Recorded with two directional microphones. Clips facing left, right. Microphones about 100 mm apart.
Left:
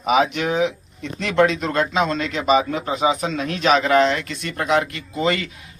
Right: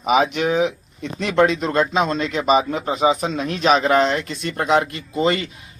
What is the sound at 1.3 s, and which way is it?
Speech, 30° right (ahead or behind).